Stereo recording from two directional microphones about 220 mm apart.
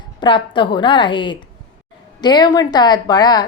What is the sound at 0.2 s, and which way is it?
A woman's voice, 20° left (ahead or behind).